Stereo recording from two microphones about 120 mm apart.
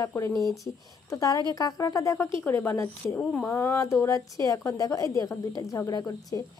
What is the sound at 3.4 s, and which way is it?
A woman's voice, 20° left (ahead or behind).